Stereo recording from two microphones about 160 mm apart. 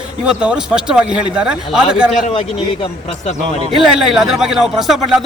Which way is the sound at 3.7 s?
Centre (ahead or behind).